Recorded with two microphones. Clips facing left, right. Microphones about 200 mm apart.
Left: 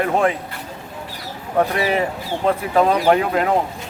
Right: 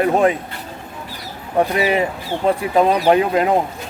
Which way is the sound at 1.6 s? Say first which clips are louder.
Right 2 dB; 15° right (ahead or behind).